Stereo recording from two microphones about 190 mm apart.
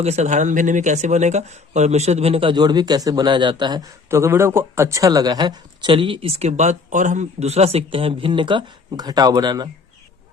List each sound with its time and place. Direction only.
0.0 s speech: 35° right (ahead or behind)